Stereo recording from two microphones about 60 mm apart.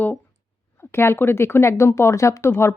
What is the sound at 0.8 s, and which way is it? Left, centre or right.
Speech, left.